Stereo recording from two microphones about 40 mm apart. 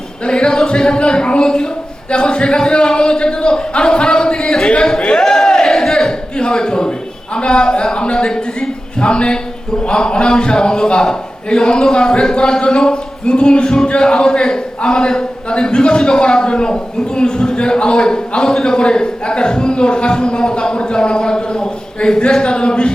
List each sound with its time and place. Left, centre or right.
0.3 s a man's voice: left
4.9 s a sound: left
7.3 s a man's voice: left